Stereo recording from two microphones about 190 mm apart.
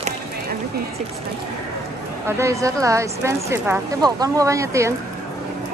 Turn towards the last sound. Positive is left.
turn(degrees=-15)  # may be behind; listen again after turning